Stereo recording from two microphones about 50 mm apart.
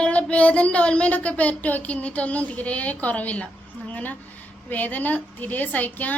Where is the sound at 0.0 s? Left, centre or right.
Left.